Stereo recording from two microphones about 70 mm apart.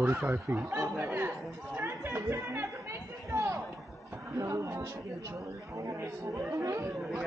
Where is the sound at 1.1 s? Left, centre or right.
Right.